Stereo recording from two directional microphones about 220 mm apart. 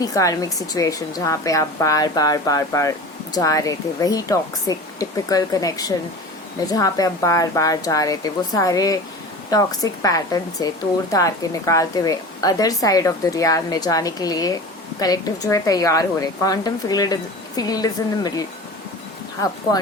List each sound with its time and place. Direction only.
0.0 s a woman's voice: 15° left (ahead or behind)